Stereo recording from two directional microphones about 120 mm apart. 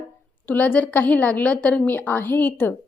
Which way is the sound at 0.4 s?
15° left (ahead or behind).